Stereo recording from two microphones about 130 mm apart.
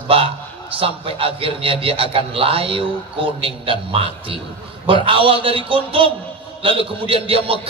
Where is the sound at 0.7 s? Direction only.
45° right (ahead or behind).